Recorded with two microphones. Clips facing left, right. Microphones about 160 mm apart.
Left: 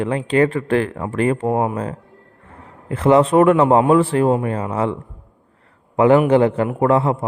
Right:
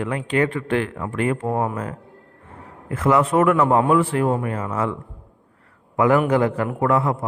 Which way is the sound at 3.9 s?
35° left (ahead or behind).